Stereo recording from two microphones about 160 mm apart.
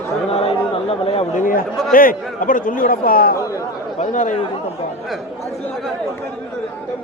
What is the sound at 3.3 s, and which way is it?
Chatter, 20° left (ahead or behind).